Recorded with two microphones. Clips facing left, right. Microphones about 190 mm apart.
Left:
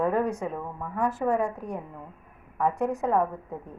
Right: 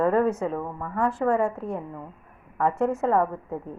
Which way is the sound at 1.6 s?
25° right (ahead or behind).